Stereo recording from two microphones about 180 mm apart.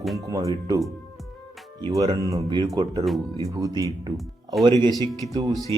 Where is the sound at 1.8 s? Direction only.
25° right (ahead or behind).